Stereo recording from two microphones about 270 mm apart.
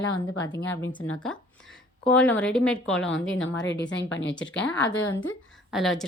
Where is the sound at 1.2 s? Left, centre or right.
Centre.